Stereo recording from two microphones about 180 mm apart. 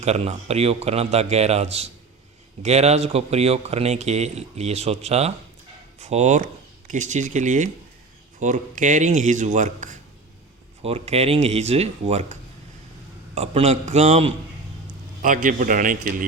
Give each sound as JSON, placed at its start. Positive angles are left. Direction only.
{"t": 0.0, "sound": "speech", "side_deg": -35}
{"t": 15.2, "sound": "speech", "side_deg": -45}